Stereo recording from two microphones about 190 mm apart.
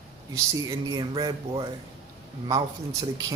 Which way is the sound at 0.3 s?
15° right (ahead or behind).